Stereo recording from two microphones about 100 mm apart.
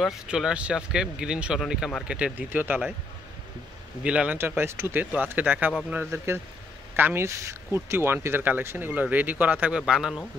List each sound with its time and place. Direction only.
0.0 s speech: 5° right (ahead or behind)
4.0 s speech: 10° right (ahead or behind)
4.4 s speech: 25° right (ahead or behind); by 10.1 s 10° right (ahead or behind)